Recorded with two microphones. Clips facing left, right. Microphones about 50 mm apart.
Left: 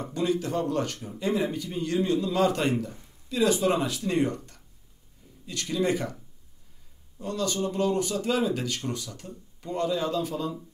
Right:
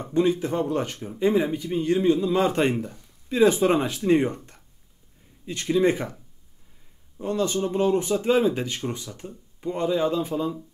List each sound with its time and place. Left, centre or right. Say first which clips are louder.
0.0 s speech: right 5 dB; right
7.2 s speech: right 4 dB; right